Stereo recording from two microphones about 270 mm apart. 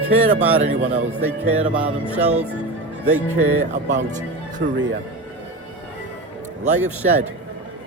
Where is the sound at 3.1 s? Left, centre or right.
Right.